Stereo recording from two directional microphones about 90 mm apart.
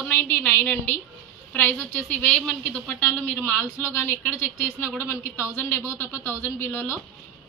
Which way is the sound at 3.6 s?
30° left (ahead or behind).